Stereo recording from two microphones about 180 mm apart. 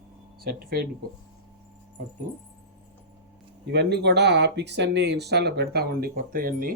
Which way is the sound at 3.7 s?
70° right (ahead or behind).